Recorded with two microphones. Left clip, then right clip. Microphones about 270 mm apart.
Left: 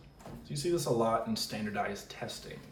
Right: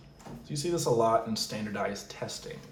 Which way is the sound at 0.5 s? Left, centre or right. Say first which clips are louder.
Right 3 dB; centre.